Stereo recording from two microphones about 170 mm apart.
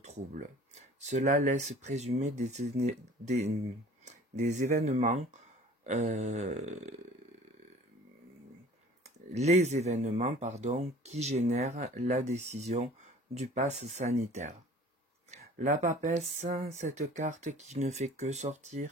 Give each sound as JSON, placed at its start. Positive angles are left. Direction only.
{"t": 0.0, "sound": "speech", "side_deg": -45}
{"t": 9.3, "sound": "speech", "side_deg": -40}